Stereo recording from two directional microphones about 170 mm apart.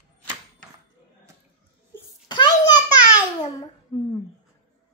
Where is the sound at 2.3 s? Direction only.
25° left (ahead or behind).